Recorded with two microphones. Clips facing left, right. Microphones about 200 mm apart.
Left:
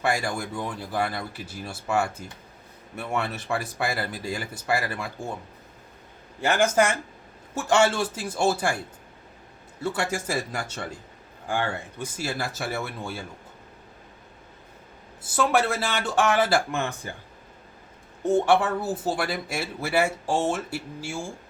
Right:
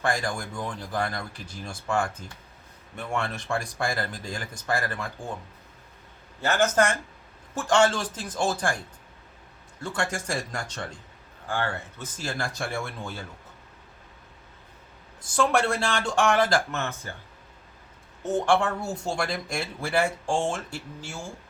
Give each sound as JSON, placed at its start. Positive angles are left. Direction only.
{"t": 0.0, "sound": "speech", "side_deg": 10}
{"t": 6.4, "sound": "speech", "side_deg": 10}
{"t": 9.8, "sound": "speech", "side_deg": 5}
{"t": 15.2, "sound": "speech", "side_deg": 5}
{"t": 18.2, "sound": "speech", "side_deg": 10}